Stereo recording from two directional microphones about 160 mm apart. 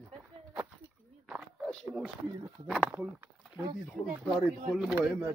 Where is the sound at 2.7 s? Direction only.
5° right (ahead or behind).